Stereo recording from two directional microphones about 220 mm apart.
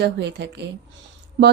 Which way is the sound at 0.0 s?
50° right (ahead or behind).